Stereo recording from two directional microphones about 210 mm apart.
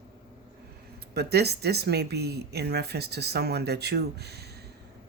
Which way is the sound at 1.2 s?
50° right (ahead or behind).